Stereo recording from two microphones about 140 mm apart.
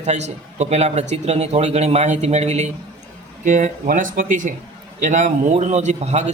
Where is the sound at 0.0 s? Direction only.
55° right (ahead or behind).